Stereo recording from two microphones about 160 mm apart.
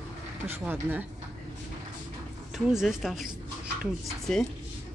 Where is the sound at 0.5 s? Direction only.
10° right (ahead or behind).